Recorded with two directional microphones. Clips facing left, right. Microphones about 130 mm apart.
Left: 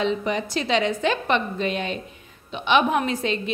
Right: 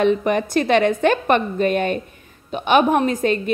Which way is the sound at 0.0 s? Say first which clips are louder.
Right 6 dB; 55° right (ahead or behind).